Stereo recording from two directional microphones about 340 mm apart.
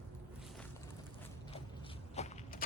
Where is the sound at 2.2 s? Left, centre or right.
Centre.